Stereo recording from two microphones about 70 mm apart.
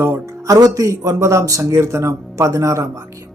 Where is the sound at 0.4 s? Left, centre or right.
Right.